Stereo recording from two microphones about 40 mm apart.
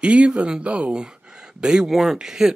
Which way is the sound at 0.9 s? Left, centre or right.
Right.